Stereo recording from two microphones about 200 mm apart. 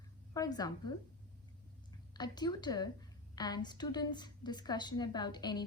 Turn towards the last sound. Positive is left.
turn(degrees=20)  # may be behind; listen again after turning